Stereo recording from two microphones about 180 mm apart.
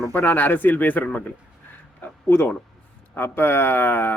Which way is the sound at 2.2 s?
10° left (ahead or behind).